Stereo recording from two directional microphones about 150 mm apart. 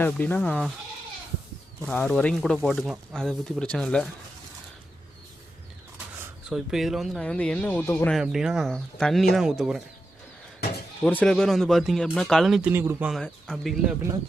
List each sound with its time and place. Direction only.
0.0 s speech: 10° left (ahead or behind)
1.9 s speech: 10° left (ahead or behind)
3.6 s speech: 5° left (ahead or behind)
6.5 s speech: centre (ahead or behind); by 8.1 s 15° left (ahead or behind)
8.1 s speech: 5° right (ahead or behind)
11.0 s speech: 10° left (ahead or behind)
12.7 s speech: 15° right (ahead or behind)
13.1 s speech: 5° left (ahead or behind)